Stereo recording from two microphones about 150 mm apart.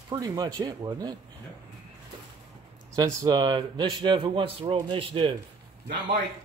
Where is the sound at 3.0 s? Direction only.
20° right (ahead or behind).